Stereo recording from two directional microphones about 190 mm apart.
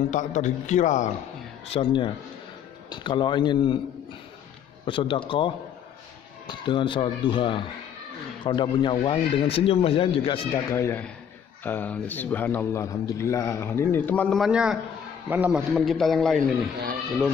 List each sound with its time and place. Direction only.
0.1 s a man's voice: 40° left (ahead or behind)
1.7 s speech: 25° left (ahead or behind)
4.8 s a man's voice: 25° left (ahead or behind); by 16.3 s centre (ahead or behind)